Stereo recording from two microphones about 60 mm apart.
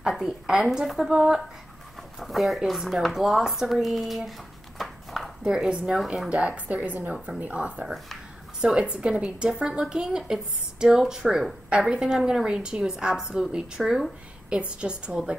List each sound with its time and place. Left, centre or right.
0.1 s a woman's voice: centre
5.4 s a woman's voice: centre
8.5 s a woman's voice: centre
14.6 s a woman's voice: centre